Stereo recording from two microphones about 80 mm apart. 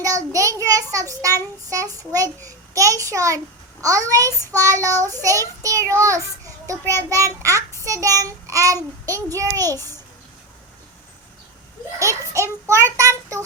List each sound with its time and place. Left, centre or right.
0.0 s child singing: right
3.0 s a child's voice: right
4.5 s child singing: right
11.9 s child singing: right